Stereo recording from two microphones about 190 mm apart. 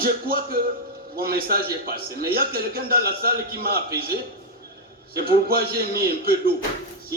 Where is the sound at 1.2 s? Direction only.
50° right (ahead or behind).